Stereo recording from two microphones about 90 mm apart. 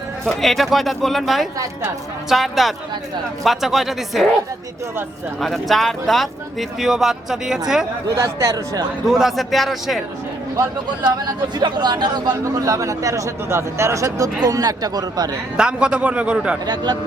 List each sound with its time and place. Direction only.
0.3 s speech: centre (ahead or behind)
5.4 s speech: centre (ahead or behind)
8.1 s speech: 35° right (ahead or behind)
9.0 s speech: 5° right (ahead or behind)
11.6 s speech: 50° right (ahead or behind)
15.5 s a man's voice: 10° right (ahead or behind)
16.6 s speech: 55° right (ahead or behind)